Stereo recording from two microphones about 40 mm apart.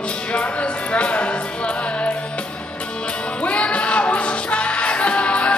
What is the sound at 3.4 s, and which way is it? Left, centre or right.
Music, left.